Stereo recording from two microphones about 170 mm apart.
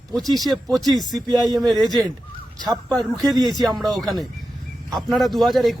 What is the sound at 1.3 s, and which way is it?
Speech, 25° right (ahead or behind).